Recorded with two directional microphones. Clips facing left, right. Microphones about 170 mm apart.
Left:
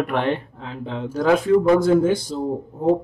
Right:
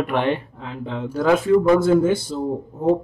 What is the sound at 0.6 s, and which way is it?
Speech, centre (ahead or behind).